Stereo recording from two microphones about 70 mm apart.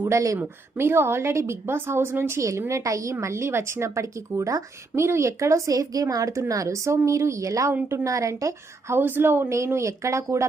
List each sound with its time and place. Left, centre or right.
0.0 s a woman's voice: right
0.3 s a woman's voice: right
9.0 s speech: right